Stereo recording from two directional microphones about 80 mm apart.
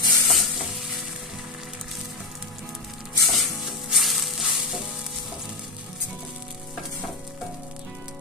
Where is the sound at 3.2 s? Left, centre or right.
Centre.